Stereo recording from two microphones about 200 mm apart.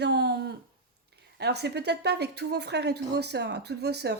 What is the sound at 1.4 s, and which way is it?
A woman's voice, 55° right (ahead or behind).